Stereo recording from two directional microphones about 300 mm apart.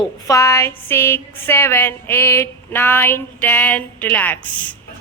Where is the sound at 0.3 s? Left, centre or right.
Centre.